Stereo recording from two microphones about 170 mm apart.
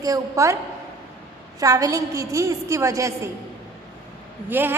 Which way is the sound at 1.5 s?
20° right (ahead or behind).